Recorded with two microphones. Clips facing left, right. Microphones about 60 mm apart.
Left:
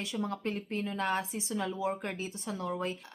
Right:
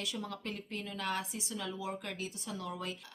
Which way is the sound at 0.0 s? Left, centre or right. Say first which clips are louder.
Left 6 dB; left.